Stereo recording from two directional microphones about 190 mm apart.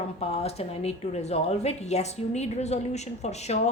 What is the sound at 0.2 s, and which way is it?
Speech, 30° left (ahead or behind).